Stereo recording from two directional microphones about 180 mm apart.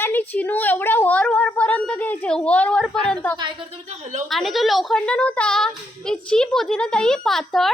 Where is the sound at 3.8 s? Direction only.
40° right (ahead or behind).